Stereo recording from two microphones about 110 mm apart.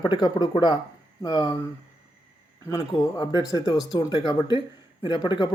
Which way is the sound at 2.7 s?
35° left (ahead or behind).